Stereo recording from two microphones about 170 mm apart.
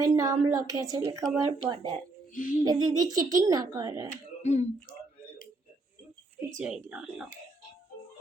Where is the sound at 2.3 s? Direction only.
50° left (ahead or behind).